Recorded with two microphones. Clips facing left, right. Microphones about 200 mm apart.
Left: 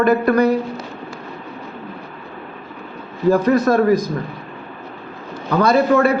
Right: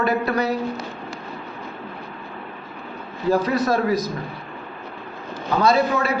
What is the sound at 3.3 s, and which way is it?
Speech, 50° left (ahead or behind).